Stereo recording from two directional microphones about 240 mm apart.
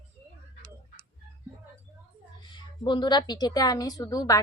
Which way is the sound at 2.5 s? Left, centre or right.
Centre.